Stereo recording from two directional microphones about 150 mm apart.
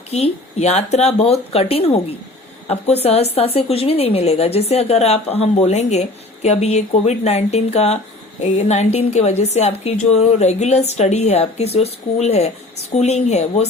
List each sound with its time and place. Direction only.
0.1 s a woman's voice: 45° left (ahead or behind)